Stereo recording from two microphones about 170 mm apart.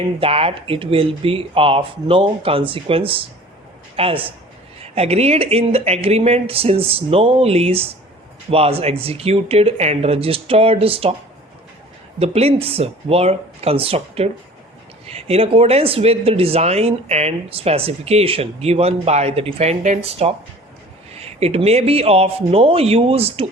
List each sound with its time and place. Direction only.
0.2 s speech: 35° right (ahead or behind)
12.2 s speech: 35° right (ahead or behind)